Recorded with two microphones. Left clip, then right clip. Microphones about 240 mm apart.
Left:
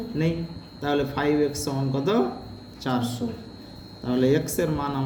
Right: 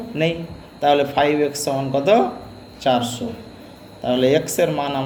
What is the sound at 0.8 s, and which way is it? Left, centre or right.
Speech, left.